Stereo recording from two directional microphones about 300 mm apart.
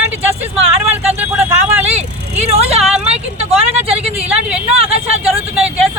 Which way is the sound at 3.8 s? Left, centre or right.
Centre.